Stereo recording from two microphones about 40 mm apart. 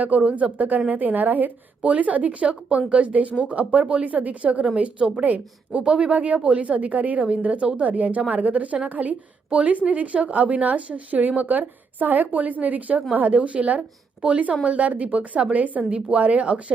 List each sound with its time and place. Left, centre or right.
0.0 s speech: right
5.8 s speech: right
6.1 s speech: right